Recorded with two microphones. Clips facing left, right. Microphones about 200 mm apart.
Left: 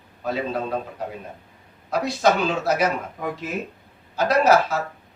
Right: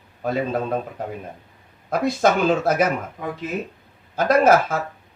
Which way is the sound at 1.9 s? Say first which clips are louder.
Right 1 dB; 50° right (ahead or behind).